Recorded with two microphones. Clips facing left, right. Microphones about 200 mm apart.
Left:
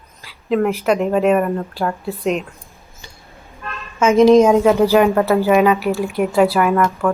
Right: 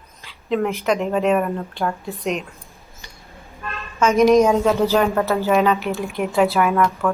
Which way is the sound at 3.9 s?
25° left (ahead or behind).